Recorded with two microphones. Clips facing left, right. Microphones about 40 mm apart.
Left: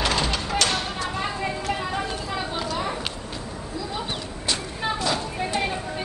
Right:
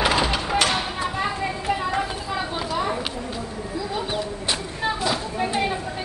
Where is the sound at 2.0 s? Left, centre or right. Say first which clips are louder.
Right 1 dB; centre.